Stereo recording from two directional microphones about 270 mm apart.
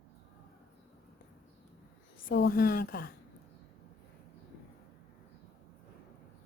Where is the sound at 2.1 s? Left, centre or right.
Left.